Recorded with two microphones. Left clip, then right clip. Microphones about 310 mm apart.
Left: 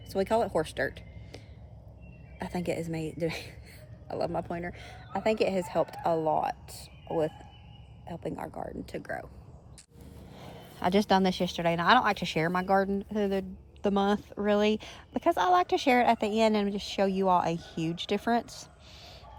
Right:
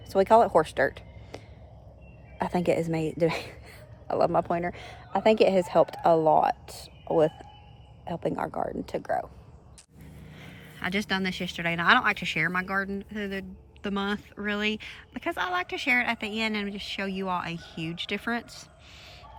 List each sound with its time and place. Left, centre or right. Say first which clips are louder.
0.1 s speech: right 8 dB; right
2.4 s a woman's voice: right 8 dB; right
8.0 s a woman's voice: right 7 dB; right
9.0 s speech: right 8 dB; centre
10.2 s speech: left 1 dB; centre